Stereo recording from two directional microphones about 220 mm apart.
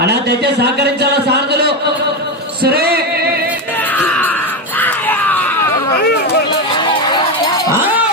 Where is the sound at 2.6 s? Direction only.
45° right (ahead or behind).